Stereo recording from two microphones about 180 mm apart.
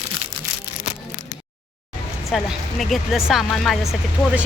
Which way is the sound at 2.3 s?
Centre (ahead or behind).